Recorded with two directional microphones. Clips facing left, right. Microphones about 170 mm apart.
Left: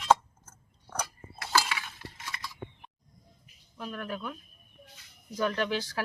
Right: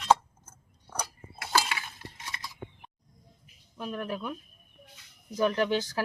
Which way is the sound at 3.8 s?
25° right (ahead or behind).